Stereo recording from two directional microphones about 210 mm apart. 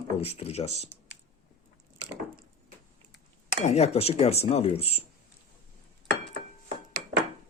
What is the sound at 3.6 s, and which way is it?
Speech, 30° left (ahead or behind).